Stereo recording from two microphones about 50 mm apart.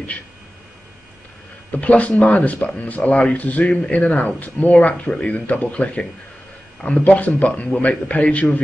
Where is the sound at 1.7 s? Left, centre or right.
Left.